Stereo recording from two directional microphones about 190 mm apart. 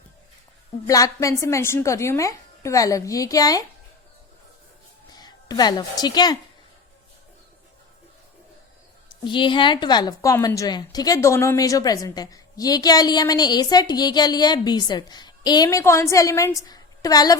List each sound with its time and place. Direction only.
0.9 s a woman's voice: 15° left (ahead or behind)
5.1 s a woman's voice: 20° left (ahead or behind)
9.2 s a woman's voice: 25° left (ahead or behind)